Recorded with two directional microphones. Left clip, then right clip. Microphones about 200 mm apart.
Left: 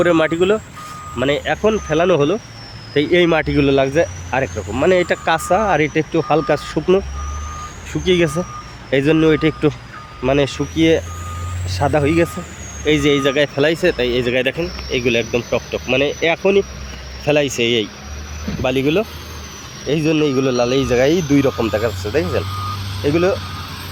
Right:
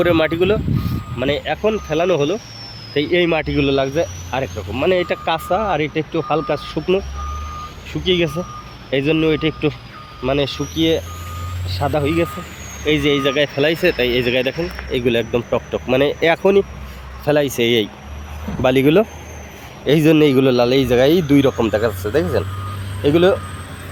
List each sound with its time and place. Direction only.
0.0 s speech: centre (ahead or behind)
8.0 s speech: 10° left (ahead or behind); by 22.4 s 10° right (ahead or behind)
23.0 s speech: 25° right (ahead or behind)